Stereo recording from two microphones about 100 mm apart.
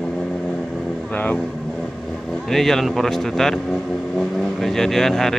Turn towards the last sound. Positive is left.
turn(degrees=5)  # may be behind; listen again after turning